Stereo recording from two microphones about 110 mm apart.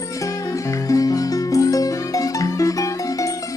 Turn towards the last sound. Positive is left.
turn(degrees=30)  # may be behind; listen again after turning